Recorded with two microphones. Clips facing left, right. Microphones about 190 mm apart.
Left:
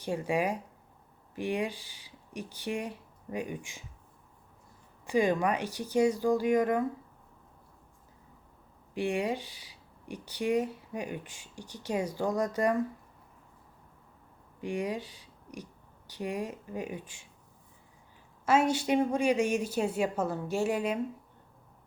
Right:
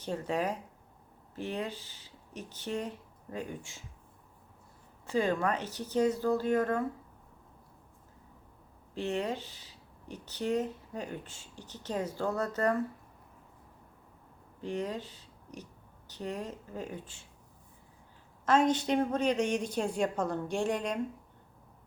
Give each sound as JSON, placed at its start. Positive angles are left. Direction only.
{"t": 0.0, "sound": "speech", "side_deg": 10}
{"t": 5.0, "sound": "speech", "side_deg": 15}
{"t": 9.0, "sound": "speech", "side_deg": 10}
{"t": 14.6, "sound": "speech", "side_deg": 10}
{"t": 18.4, "sound": "speech", "side_deg": 10}